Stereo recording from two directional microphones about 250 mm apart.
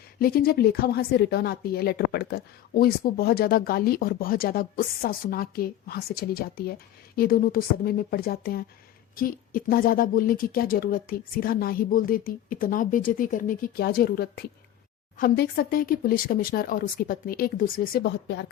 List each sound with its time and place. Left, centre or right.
0.2 s a woman's voice: left